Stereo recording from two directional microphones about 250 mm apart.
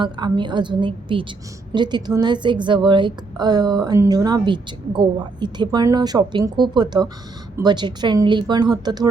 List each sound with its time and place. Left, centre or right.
0.0 s a woman's voice: centre